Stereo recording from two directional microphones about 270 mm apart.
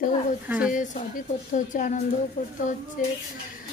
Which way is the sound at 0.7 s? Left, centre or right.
Left.